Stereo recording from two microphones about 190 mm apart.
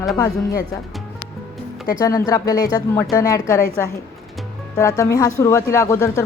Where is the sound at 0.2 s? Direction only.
20° left (ahead or behind).